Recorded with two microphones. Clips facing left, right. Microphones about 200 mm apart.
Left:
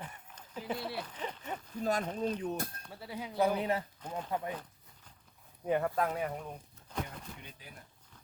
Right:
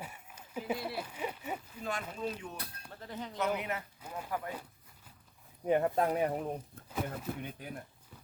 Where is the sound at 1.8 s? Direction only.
40° left (ahead or behind).